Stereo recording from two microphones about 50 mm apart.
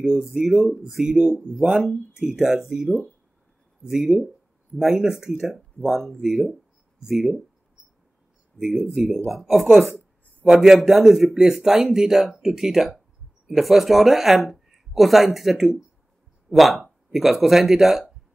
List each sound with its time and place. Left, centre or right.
0.0 s a man's voice: centre
8.5 s a man's voice: centre